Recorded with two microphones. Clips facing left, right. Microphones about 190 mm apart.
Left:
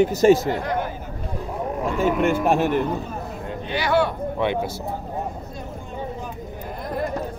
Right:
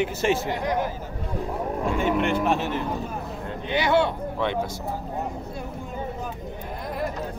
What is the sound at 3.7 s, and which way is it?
Speech, 20° right (ahead or behind).